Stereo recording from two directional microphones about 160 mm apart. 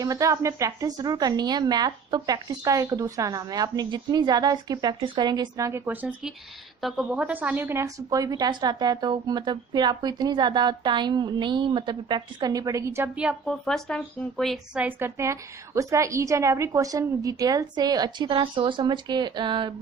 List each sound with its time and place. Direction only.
0.0 s a woman's voice: 20° right (ahead or behind)